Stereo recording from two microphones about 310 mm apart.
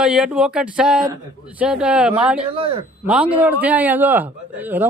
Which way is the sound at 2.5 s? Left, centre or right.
Centre.